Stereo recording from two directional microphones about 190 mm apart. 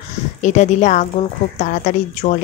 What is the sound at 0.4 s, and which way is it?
Speech, 40° left (ahead or behind).